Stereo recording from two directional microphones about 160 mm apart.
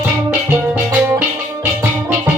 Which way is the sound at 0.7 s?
10° right (ahead or behind).